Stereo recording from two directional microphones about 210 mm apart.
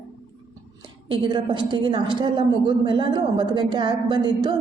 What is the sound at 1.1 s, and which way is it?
A woman's voice, 20° right (ahead or behind).